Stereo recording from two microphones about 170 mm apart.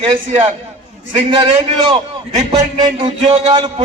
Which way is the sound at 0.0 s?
30° right (ahead or behind).